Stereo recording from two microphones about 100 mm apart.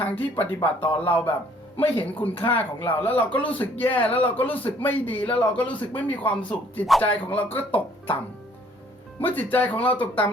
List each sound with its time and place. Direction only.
0.0 s a man's voice: 20° left (ahead or behind)
3.9 s speech: 65° left (ahead or behind)
4.2 s a man's voice: 15° left (ahead or behind)
9.2 s a man's voice: 15° left (ahead or behind)